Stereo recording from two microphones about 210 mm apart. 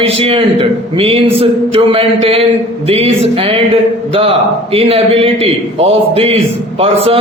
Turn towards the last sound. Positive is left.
turn(degrees=-30)  # may be behind; listen again after turning